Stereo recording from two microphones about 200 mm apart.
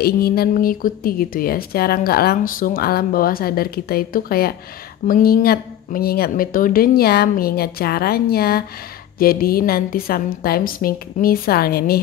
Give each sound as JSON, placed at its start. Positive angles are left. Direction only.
{"t": 0.0, "sound": "speech", "side_deg": 50}